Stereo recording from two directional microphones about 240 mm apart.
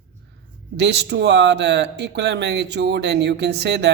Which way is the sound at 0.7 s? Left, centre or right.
Right.